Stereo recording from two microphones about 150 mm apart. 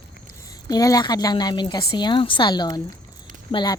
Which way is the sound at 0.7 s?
25° left (ahead or behind).